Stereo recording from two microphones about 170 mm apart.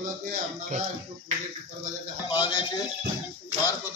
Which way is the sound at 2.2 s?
30° left (ahead or behind).